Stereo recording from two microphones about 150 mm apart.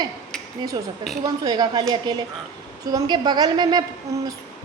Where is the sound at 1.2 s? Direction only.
25° right (ahead or behind).